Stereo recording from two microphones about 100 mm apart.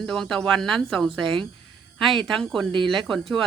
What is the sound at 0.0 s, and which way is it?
Speech, centre (ahead or behind).